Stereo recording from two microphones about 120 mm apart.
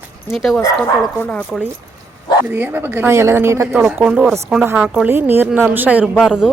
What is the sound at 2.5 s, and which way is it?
Speech, 15° right (ahead or behind).